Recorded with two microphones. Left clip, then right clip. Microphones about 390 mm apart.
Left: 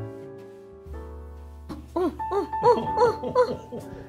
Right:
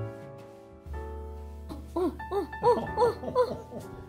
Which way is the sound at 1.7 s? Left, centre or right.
Centre.